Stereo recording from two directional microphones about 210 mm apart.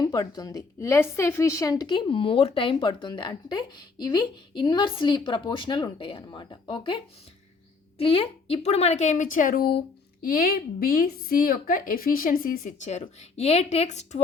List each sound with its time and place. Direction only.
0.0 s a woman's voice: 20° left (ahead or behind)